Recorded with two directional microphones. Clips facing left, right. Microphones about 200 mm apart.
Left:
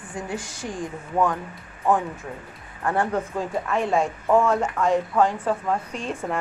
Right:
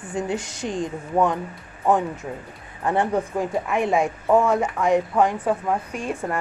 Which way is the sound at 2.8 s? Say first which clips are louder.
Right 2 dB; 20° right (ahead or behind).